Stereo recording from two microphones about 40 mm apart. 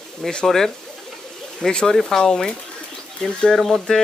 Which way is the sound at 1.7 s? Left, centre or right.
Centre.